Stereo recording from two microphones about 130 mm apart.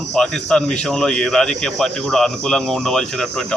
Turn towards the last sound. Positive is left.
turn(degrees=5)  # may be behind; listen again after turning